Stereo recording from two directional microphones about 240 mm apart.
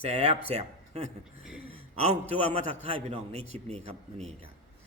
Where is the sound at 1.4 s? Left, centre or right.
Centre.